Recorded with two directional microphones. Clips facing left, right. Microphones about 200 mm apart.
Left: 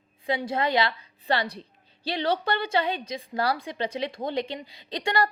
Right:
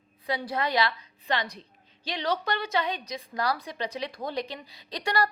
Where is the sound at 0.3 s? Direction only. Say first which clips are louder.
Left 3 dB; 25° left (ahead or behind).